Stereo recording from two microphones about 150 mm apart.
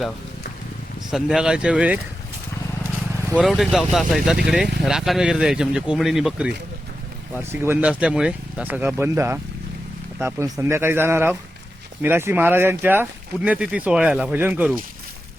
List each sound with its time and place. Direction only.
1.1 s speech: 5° right (ahead or behind)
3.3 s speech: centre (ahead or behind)
7.3 s speech: 15° right (ahead or behind)